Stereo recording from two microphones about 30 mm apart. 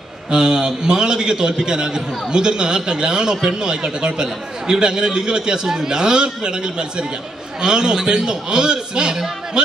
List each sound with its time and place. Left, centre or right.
0.3 s a man's voice: right